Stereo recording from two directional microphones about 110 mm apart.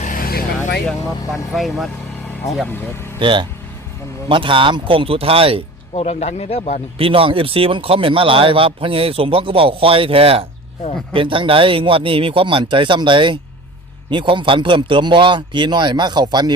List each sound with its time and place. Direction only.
0.9 s speech: centre (ahead or behind)
2.6 s speech: 20° left (ahead or behind)
3.2 s speech: 50° right (ahead or behind)
5.9 s speech: 70° left (ahead or behind)
7.0 s a man's voice: 55° right (ahead or behind)